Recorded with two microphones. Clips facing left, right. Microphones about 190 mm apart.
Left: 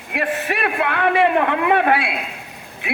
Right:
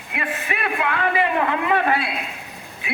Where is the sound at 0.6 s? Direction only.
60° left (ahead or behind).